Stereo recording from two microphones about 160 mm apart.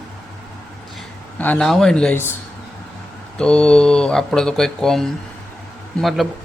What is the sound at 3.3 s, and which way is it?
Speech, 5° left (ahead or behind).